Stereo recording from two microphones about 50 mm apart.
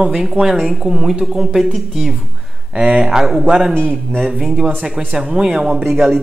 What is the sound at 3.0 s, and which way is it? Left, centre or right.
Speech, centre.